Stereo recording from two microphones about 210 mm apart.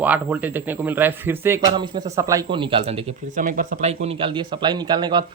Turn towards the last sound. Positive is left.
turn(degrees=-20)  # may be behind; listen again after turning